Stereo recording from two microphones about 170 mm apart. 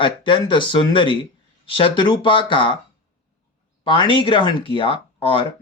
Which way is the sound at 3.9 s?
30° left (ahead or behind).